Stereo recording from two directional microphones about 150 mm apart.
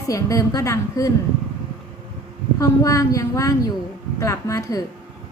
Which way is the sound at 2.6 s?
20° left (ahead or behind).